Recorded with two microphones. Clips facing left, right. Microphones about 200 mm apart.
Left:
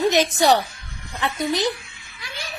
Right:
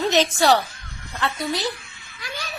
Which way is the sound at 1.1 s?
15° left (ahead or behind).